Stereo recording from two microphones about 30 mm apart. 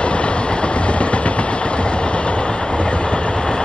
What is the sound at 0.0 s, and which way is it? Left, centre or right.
Vehicle, left.